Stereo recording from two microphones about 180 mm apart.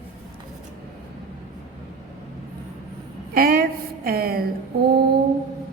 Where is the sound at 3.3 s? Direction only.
55° right (ahead or behind).